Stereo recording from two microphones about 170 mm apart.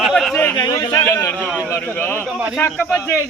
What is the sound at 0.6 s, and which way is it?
Cricket, 25° left (ahead or behind).